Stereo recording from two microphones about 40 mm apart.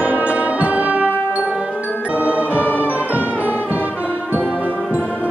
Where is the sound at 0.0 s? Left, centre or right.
Right.